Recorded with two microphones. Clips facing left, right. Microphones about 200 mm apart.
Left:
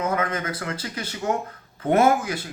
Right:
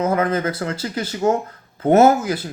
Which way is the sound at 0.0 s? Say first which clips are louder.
Right 6 dB; 30° right (ahead or behind).